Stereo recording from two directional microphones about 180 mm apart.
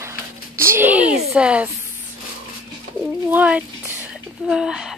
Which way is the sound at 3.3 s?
10° right (ahead or behind).